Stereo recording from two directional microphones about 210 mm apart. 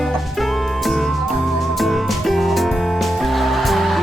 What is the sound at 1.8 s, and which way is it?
Music, centre (ahead or behind).